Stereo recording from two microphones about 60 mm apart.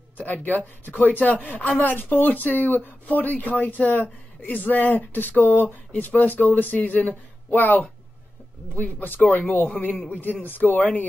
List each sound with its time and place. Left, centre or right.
0.3 s a man's voice: left